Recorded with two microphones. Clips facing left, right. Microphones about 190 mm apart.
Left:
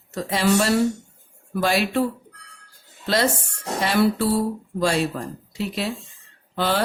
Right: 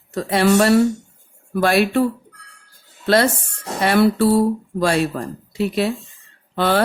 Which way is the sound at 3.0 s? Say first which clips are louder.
Right 5 dB; 60° right (ahead or behind).